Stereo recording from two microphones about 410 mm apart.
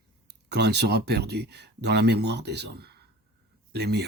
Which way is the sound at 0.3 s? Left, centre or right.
Right.